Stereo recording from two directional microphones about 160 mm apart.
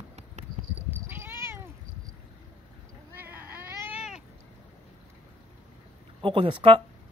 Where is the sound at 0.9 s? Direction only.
15° right (ahead or behind).